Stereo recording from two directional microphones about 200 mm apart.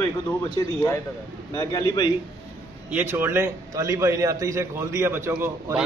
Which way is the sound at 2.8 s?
10° right (ahead or behind).